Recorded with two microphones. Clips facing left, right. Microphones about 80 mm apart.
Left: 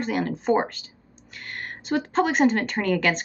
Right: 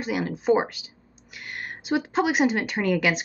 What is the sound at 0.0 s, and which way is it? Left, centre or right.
Speech, centre.